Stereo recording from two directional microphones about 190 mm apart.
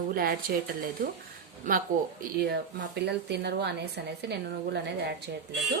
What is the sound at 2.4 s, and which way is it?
A woman's voice, 60° right (ahead or behind).